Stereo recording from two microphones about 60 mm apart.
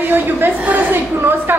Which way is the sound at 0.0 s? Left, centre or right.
Right.